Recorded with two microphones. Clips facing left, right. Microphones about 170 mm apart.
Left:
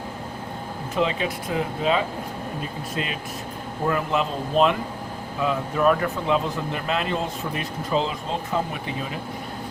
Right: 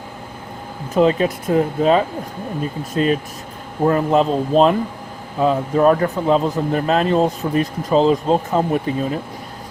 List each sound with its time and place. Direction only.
0.9 s speech: 45° right (ahead or behind)